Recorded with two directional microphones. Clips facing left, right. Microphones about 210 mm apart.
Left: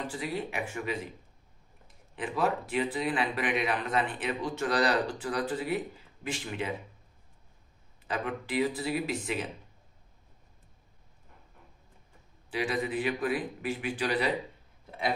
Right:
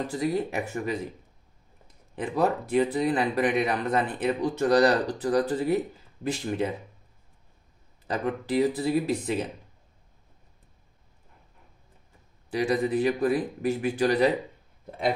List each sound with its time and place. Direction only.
0.0 s speech: 40° right (ahead or behind)
2.1 s speech: 40° right (ahead or behind)
8.1 s speech: 40° right (ahead or behind)
12.4 s speech: 40° right (ahead or behind)